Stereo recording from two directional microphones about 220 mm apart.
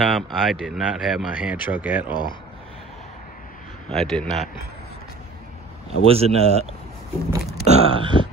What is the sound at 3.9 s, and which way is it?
Speech, centre (ahead or behind).